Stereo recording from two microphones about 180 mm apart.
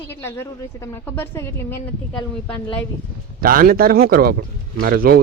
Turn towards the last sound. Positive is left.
turn(degrees=-55)  # may be behind; listen again after turning